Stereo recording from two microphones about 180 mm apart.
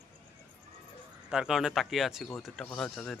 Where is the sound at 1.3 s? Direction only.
5° right (ahead or behind).